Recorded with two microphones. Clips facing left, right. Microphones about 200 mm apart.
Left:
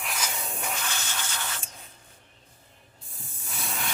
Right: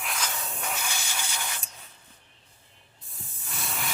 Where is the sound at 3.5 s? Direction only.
Centre (ahead or behind).